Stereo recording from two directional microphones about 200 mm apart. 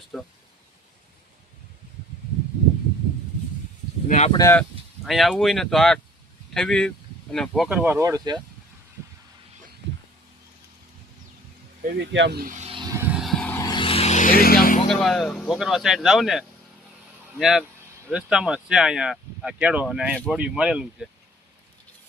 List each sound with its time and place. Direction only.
0.1 s speech: centre (ahead or behind)
4.3 s speech: 20° left (ahead or behind)
5.0 s speech: centre (ahead or behind); by 8.4 s 20° right (ahead or behind)
11.8 s speech: 45° right (ahead or behind)
12.1 s vehicle: 60° right (ahead or behind); by 14.8 s 50° left (ahead or behind)
14.8 s speech: centre (ahead or behind)